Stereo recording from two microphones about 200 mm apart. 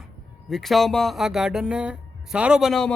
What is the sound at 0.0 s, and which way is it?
Speech, centre (ahead or behind).